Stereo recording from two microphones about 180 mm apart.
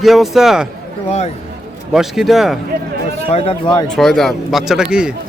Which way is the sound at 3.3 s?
35° left (ahead or behind).